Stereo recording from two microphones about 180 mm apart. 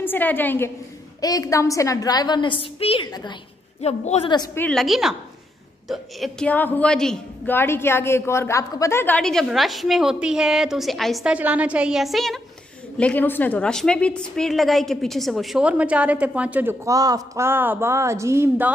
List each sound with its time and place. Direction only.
0.0 s a woman's voice: 10° left (ahead or behind)
3.8 s a woman's voice: 35° left (ahead or behind)
4.6 s a woman's voice: 5° left (ahead or behind); by 18.7 s 15° right (ahead or behind)